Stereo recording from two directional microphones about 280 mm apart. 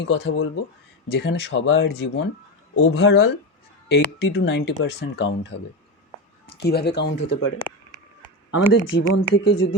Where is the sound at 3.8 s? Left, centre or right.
Left.